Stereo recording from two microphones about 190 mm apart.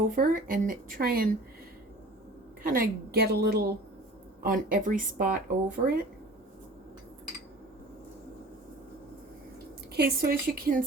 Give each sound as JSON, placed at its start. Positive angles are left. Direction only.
{"t": 0.2, "sound": "speech", "side_deg": -45}
{"t": 2.6, "sound": "a woman's voice", "side_deg": -50}
{"t": 9.9, "sound": "speech", "side_deg": -55}